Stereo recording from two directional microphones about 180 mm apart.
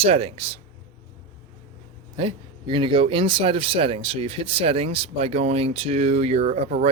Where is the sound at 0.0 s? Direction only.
35° right (ahead or behind).